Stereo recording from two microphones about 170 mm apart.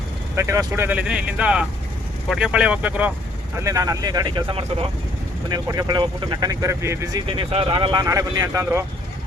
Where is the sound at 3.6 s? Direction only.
20° right (ahead or behind).